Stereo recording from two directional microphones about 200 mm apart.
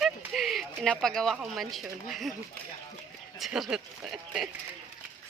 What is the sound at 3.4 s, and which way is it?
Speech, 5° right (ahead or behind).